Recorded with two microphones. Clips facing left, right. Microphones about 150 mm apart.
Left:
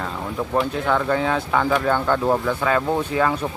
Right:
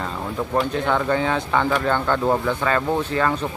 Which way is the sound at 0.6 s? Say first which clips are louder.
Even; centre (ahead or behind).